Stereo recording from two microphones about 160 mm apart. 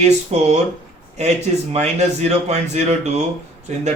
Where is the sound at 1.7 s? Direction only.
45° right (ahead or behind).